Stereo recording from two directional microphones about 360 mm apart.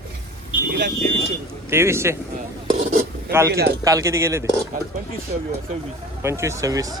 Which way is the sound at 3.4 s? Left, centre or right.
Right.